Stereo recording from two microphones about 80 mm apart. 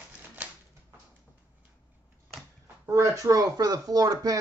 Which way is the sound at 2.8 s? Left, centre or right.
Right.